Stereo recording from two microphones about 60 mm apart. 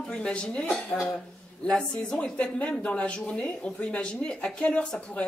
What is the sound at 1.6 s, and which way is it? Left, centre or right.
Speech, centre.